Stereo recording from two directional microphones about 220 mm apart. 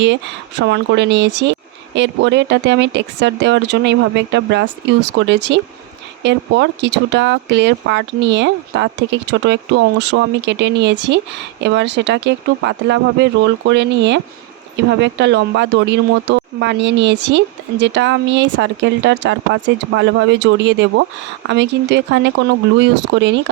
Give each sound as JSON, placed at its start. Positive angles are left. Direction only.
{"t": 0.6, "sound": "speech", "side_deg": -55}